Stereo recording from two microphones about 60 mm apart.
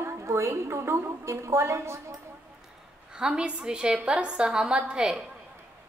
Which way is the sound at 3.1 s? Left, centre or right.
Centre.